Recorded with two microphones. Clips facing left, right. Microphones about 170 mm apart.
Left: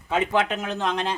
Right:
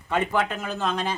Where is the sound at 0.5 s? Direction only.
20° left (ahead or behind).